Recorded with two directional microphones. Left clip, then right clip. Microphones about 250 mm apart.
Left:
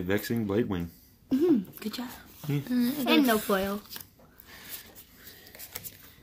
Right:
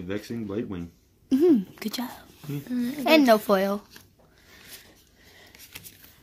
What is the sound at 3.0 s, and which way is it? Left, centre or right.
Speech, right.